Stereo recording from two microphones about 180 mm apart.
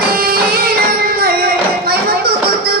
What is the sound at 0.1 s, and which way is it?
Music, 55° right (ahead or behind).